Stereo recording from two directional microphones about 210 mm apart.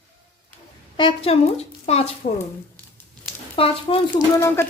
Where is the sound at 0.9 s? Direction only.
25° left (ahead or behind).